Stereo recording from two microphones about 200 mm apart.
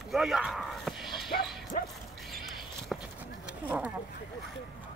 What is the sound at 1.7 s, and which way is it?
Dog, 40° left (ahead or behind).